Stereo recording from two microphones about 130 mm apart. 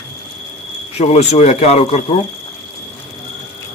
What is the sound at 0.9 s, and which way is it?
Speech, 55° left (ahead or behind).